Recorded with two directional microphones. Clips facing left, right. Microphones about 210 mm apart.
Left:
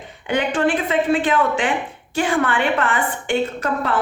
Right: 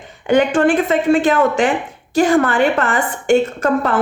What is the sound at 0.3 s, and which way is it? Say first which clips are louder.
A woman's voice: right 6 dB; 45° right (ahead or behind).